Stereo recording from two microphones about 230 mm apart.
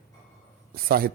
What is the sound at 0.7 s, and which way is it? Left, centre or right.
Speech, right.